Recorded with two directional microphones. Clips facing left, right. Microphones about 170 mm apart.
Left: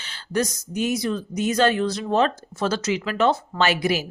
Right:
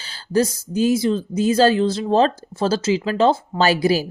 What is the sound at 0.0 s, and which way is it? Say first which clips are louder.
Speech: right 5 dB; 30° right (ahead or behind).